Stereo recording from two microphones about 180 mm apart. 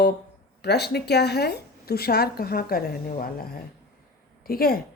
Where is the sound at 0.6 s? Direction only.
65° left (ahead or behind).